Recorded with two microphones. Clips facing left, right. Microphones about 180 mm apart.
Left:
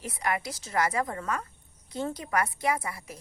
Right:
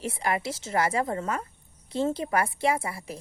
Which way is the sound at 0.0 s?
25° right (ahead or behind).